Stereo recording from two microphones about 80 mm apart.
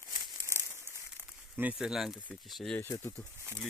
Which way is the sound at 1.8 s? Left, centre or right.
Centre.